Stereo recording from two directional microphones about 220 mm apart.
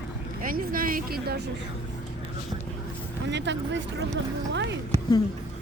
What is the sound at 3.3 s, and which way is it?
Speech, 55° right (ahead or behind).